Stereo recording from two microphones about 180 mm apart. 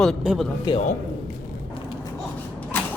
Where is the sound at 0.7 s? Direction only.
25° left (ahead or behind).